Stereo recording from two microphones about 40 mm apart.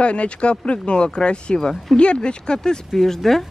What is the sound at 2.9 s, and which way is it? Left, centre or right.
Speech, centre.